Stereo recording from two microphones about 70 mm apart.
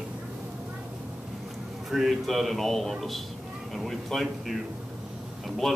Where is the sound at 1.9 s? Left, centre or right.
Centre.